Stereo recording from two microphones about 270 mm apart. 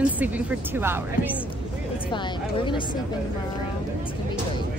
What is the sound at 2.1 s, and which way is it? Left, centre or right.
Speech, centre.